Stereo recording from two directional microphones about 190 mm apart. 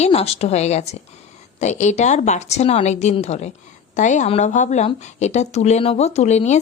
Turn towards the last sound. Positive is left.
turn(degrees=35)  # may be behind; listen again after turning